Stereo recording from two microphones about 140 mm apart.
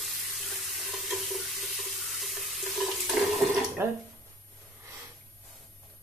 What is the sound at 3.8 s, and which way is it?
Speech, 15° right (ahead or behind).